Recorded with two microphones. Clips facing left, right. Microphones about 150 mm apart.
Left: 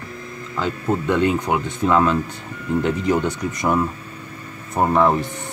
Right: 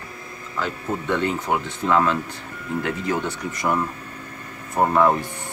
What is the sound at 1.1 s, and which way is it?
Speech, 15° left (ahead or behind).